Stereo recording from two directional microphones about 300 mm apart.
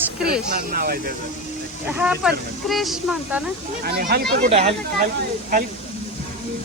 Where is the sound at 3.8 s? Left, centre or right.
Right.